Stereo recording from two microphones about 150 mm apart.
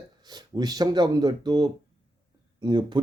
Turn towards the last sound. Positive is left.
turn(degrees=-30)  # may be behind; listen again after turning